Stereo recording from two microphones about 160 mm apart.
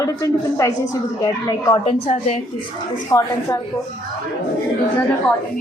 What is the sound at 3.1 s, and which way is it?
Speech, 20° left (ahead or behind).